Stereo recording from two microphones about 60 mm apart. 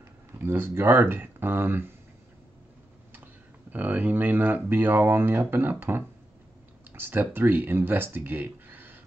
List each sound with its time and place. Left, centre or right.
0.4 s speech: right
3.7 s speech: right